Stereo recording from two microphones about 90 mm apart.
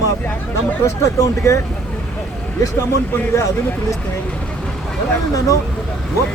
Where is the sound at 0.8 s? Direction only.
35° left (ahead or behind).